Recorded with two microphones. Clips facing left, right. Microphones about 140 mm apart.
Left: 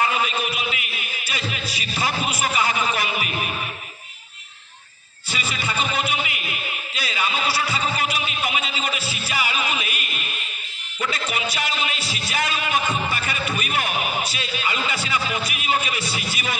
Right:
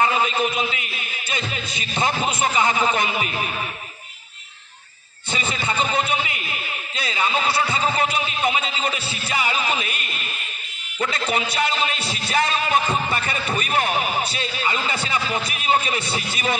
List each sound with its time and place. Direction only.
0.0 s music: 30° right (ahead or behind)
5.3 s a sound: 25° right (ahead or behind)
11.5 s music: 30° right (ahead or behind)